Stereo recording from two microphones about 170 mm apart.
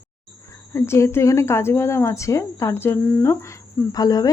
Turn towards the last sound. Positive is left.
turn(degrees=20)  # may be behind; listen again after turning